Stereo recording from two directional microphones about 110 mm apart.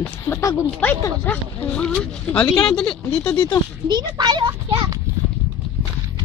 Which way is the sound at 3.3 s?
40° left (ahead or behind).